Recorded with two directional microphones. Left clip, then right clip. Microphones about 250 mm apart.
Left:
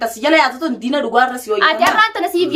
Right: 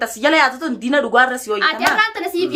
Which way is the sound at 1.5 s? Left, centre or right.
Centre.